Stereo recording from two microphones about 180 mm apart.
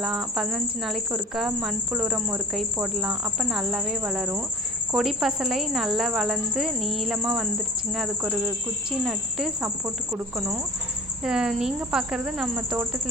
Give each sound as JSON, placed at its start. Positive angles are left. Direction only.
{"t": 0.0, "sound": "speech", "side_deg": 0}
{"t": 9.6, "sound": "speech", "side_deg": -15}
{"t": 11.2, "sound": "speech", "side_deg": -5}